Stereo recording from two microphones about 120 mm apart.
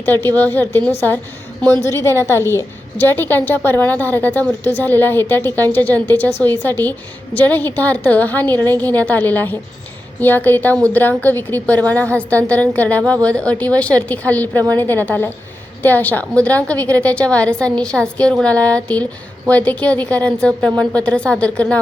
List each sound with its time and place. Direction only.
0.0 s a woman's voice: 20° left (ahead or behind)
1.8 s a woman's voice: 25° left (ahead or behind)